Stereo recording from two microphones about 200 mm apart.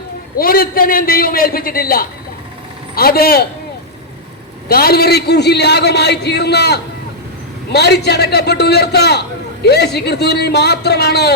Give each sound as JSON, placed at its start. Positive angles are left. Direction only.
{"t": 0.3, "sound": "a man's voice", "side_deg": 45}
{"t": 4.7, "sound": "a man's voice", "side_deg": 50}